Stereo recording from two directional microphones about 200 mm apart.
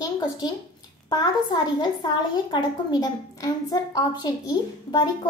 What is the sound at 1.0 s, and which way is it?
A woman's voice, 20° left (ahead or behind).